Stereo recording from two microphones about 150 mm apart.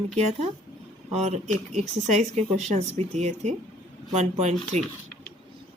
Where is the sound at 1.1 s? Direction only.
45° right (ahead or behind).